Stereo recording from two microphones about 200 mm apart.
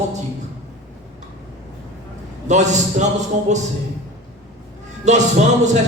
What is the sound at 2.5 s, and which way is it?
Speech, 35° right (ahead or behind).